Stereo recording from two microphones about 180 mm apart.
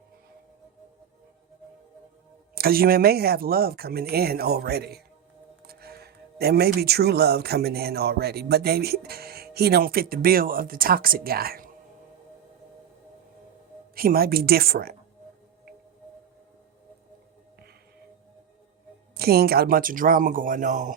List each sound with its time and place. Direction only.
2.6 s speech: 55° right (ahead or behind)
13.9 s speech: 55° right (ahead or behind)
19.1 s speech: 60° right (ahead or behind)